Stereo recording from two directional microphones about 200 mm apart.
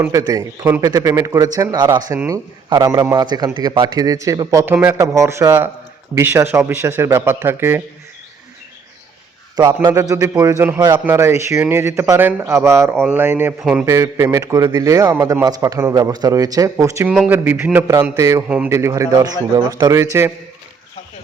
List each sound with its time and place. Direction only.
0.0 s a man's voice: 15° right (ahead or behind)
9.8 s a man's voice: 15° right (ahead or behind)